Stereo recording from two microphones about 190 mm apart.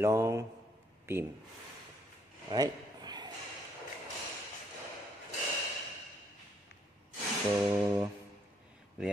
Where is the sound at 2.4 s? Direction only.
20° right (ahead or behind).